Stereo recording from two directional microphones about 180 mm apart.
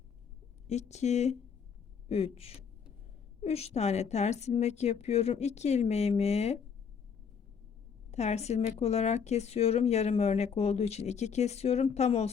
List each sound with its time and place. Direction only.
0.7 s speech: 40° left (ahead or behind)
8.1 s speech: 40° left (ahead or behind)